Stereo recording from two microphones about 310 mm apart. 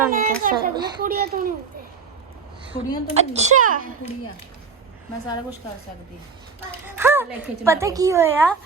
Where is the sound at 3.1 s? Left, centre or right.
Right.